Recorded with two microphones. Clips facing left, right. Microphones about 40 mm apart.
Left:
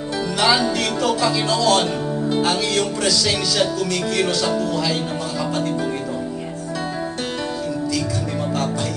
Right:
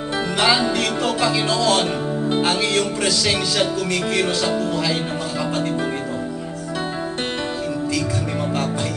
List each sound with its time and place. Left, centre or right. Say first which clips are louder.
0.4 s speech: even; right